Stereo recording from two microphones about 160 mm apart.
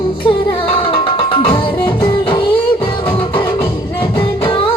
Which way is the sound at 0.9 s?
35° left (ahead or behind).